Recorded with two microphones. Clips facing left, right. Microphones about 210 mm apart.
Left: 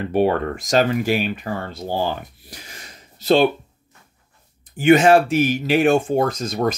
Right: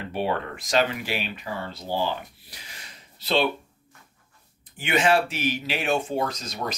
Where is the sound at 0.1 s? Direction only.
45° left (ahead or behind).